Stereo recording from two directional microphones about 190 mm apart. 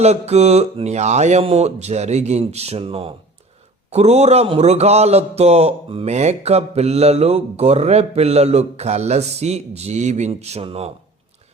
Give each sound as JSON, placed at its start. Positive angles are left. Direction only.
{"t": 0.0, "sound": "speech", "side_deg": -35}